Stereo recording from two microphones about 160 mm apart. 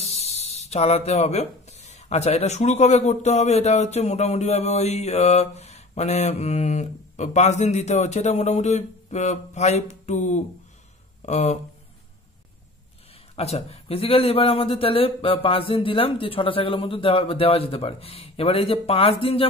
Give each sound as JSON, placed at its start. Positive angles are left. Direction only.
{"t": 0.0, "sound": "speech", "side_deg": 40}
{"t": 13.4, "sound": "speech", "side_deg": 40}